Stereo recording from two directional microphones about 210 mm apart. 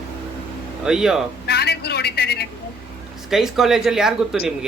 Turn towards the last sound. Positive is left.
turn(degrees=0)  # may be behind; listen again after turning